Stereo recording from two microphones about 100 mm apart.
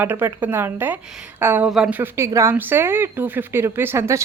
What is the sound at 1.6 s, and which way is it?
Speech, 10° right (ahead or behind).